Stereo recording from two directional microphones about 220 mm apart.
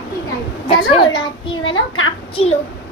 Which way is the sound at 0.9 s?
20° left (ahead or behind).